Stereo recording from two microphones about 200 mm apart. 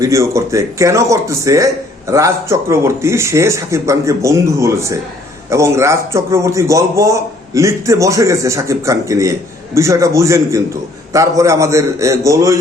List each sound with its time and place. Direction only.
0.0 s speech: 15° right (ahead or behind)